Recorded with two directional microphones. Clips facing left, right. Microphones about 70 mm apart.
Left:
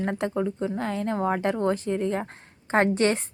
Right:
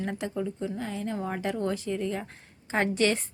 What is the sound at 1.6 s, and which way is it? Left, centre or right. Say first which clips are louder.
A woman's voice: left 5 dB; left.